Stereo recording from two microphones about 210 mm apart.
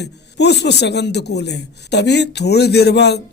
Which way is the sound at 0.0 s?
55° left (ahead or behind).